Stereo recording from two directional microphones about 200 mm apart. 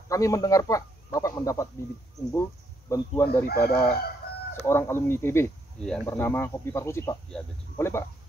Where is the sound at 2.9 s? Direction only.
10° left (ahead or behind).